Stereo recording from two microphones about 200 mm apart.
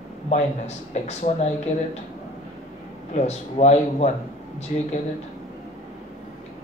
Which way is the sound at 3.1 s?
35° left (ahead or behind).